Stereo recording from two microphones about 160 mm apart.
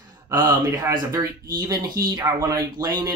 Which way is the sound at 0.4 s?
20° right (ahead or behind).